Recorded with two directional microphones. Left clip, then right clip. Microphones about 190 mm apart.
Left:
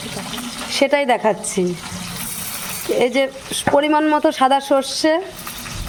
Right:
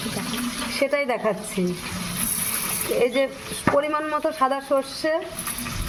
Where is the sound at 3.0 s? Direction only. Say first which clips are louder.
Left 4 dB; 60° left (ahead or behind).